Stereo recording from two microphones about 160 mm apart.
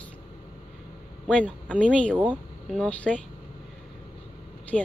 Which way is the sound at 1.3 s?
5° left (ahead or behind).